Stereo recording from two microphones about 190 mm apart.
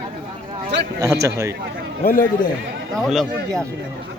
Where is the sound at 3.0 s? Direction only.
Centre (ahead or behind).